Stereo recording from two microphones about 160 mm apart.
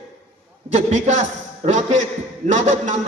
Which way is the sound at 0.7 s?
45° right (ahead or behind).